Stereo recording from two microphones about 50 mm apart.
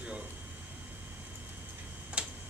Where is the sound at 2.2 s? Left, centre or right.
Right.